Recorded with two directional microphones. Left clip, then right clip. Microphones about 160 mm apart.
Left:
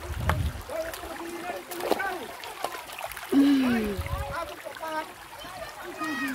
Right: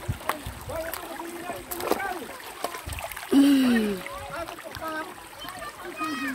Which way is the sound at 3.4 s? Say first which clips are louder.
Right 2 dB; 20° right (ahead or behind).